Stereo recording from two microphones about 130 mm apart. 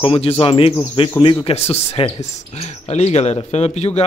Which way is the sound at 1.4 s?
50° left (ahead or behind).